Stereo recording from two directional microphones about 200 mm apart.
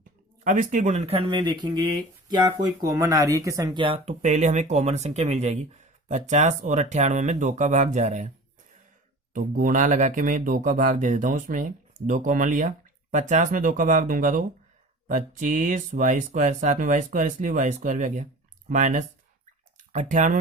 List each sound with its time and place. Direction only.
0.4 s speech: 40° right (ahead or behind)
9.3 s speech: 40° right (ahead or behind)